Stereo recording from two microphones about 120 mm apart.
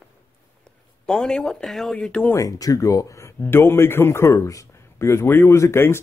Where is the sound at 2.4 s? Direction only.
30° left (ahead or behind).